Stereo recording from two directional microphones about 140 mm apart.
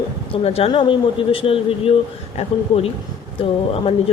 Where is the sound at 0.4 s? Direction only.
45° left (ahead or behind).